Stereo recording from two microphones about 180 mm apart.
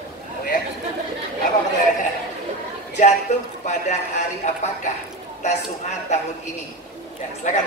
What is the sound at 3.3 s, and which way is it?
A woman's voice, 40° left (ahead or behind).